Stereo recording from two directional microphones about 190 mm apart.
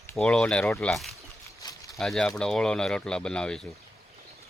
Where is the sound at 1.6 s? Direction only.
20° left (ahead or behind).